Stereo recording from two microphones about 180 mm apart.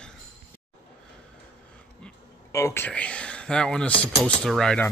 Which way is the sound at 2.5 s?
15° left (ahead or behind).